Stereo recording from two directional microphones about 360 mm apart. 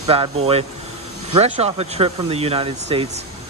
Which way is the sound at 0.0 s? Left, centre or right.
Centre.